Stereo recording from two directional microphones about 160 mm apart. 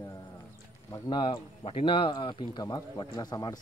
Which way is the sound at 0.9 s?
30° left (ahead or behind).